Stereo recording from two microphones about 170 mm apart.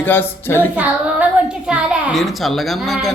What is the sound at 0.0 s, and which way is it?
Speech, 10° left (ahead or behind).